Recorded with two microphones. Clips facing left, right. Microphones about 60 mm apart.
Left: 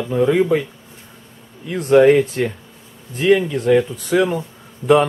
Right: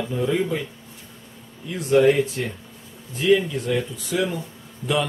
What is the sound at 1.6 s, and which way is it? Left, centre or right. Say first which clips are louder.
Speech: left 6 dB; left.